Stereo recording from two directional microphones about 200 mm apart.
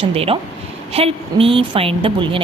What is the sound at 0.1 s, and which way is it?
Speech, 30° right (ahead or behind).